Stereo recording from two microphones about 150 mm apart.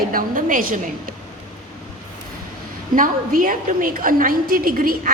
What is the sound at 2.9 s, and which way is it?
A woman's voice, 65° right (ahead or behind).